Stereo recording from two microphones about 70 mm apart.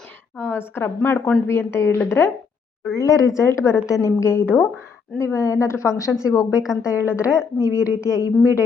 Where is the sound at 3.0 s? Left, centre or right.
Left.